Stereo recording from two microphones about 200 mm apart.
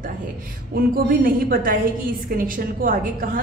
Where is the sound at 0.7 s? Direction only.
45° right (ahead or behind).